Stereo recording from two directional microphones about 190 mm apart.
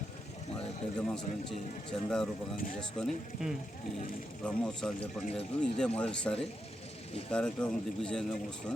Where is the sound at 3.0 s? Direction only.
5° left (ahead or behind).